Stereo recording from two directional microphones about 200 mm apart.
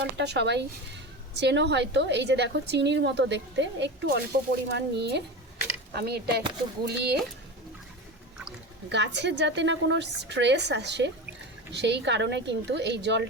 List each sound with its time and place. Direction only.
0.0 s a woman's voice: 55° right (ahead or behind)
8.9 s a woman's voice: 60° right (ahead or behind)